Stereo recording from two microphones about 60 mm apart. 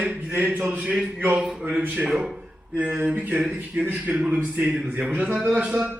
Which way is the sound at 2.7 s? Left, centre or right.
Right.